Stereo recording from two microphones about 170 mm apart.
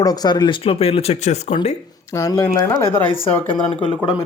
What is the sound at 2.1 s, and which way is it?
Speech, 20° left (ahead or behind).